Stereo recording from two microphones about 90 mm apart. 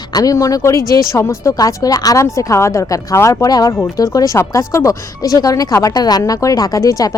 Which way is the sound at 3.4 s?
45° left (ahead or behind).